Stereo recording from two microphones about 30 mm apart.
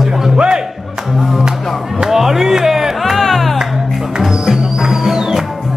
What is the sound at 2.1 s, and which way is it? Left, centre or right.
Speech, centre.